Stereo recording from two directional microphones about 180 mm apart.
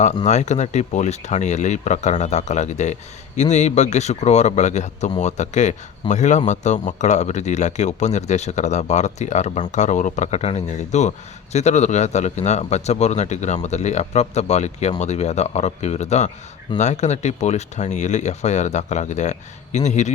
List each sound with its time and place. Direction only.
0.3 s speech: 40° left (ahead or behind)